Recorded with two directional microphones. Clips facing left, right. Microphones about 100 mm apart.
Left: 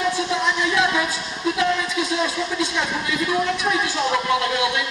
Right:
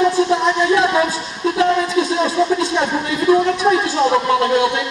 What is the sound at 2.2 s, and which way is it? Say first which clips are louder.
A man's voice: right 8 dB; 35° right (ahead or behind).